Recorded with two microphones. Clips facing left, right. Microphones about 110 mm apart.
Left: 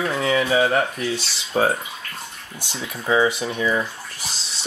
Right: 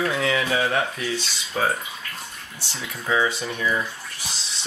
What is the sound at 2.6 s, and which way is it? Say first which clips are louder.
Speech: left 3 dB; 15° left (ahead or behind).